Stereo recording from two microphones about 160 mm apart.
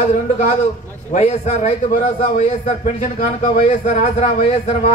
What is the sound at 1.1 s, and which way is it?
A man's voice, 45° left (ahead or behind).